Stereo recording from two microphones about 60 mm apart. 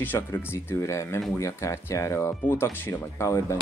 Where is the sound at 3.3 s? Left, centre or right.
Left.